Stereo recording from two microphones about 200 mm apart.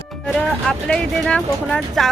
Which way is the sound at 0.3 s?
5° left (ahead or behind).